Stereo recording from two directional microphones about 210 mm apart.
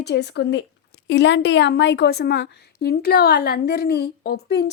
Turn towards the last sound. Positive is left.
turn(degrees=50)  # may be behind; listen again after turning